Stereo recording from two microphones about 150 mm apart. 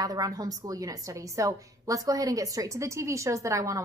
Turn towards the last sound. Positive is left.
turn(degrees=-20)  # may be behind; listen again after turning